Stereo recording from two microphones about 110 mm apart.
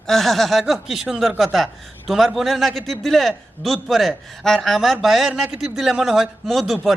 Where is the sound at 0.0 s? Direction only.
5° left (ahead or behind).